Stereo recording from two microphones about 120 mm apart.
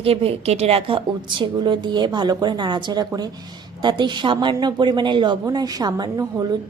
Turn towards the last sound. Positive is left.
turn(degrees=-30)  # may be behind; listen again after turning